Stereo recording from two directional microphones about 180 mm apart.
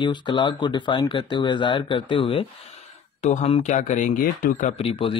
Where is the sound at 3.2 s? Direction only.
40° left (ahead or behind).